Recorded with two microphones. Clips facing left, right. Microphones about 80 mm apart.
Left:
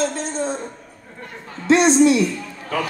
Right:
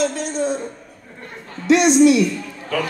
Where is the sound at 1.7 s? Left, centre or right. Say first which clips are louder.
Right 1 dB; left.